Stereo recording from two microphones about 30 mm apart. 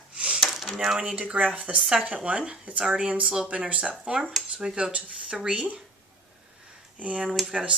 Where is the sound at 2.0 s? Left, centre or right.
Right.